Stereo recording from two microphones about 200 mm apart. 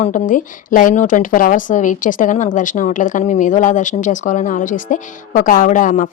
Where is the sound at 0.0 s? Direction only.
40° left (ahead or behind).